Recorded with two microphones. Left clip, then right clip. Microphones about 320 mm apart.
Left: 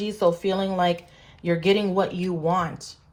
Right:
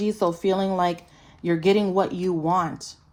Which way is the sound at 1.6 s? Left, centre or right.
Right.